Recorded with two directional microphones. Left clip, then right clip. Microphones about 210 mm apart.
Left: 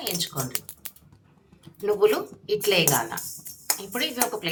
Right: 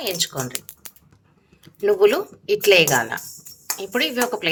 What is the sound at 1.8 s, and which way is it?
Speech, 45° right (ahead or behind).